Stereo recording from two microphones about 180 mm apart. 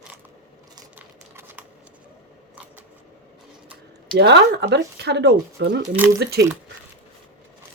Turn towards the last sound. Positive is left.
turn(degrees=-70)  # may be behind; listen again after turning